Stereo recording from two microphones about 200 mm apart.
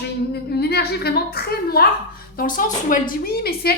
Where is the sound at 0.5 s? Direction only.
55° left (ahead or behind).